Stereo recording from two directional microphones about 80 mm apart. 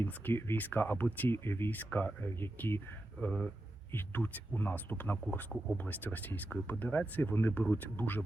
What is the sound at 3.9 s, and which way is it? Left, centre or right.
Speech, left.